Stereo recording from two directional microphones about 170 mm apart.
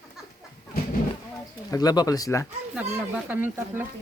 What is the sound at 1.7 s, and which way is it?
Speech, 20° left (ahead or behind).